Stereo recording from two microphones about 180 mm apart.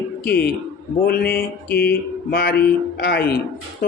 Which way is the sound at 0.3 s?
60° left (ahead or behind).